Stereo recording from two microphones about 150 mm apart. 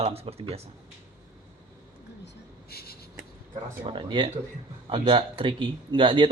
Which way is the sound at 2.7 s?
90° left.